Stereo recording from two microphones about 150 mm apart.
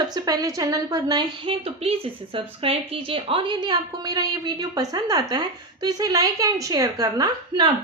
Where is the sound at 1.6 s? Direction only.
40° right (ahead or behind).